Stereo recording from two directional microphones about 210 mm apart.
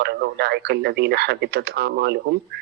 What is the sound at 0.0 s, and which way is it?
Speech, 50° right (ahead or behind).